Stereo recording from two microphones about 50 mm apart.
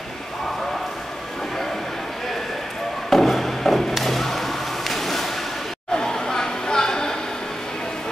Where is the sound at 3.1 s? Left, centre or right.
Centre.